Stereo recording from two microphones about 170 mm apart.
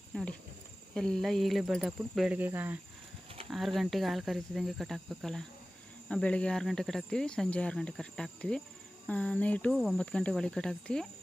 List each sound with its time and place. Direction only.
0.1 s speech: centre (ahead or behind)
3.5 s speech: centre (ahead or behind)